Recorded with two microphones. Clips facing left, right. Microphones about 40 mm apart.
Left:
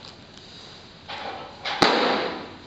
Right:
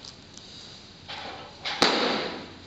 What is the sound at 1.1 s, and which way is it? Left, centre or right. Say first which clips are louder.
Thump: left 5 dB; centre.